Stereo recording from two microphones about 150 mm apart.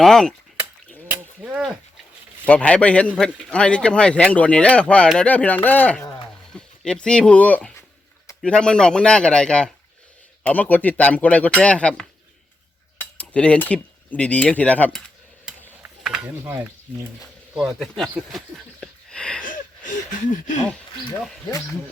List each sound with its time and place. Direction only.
0.0 s speech: 5° left (ahead or behind)
1.1 s a sound: 10° right (ahead or behind)
2.5 s a man's voice: 10° left (ahead or behind)
13.0 s cutlery: 10° left (ahead or behind)
15.4 s mechanisms: 5° right (ahead or behind)
17.5 s speech: centre (ahead or behind)
19.4 s a sound: 60° left (ahead or behind)